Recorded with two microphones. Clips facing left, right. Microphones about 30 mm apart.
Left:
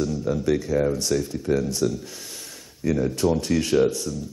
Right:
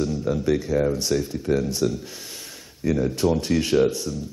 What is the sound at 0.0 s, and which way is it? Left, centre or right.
Music, centre.